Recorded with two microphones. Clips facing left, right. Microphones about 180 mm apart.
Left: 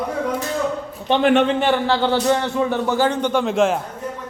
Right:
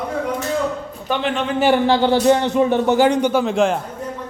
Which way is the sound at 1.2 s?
55° left (ahead or behind).